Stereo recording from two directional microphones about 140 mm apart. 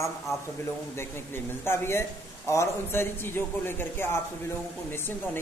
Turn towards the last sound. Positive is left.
turn(degrees=15)  # may be behind; listen again after turning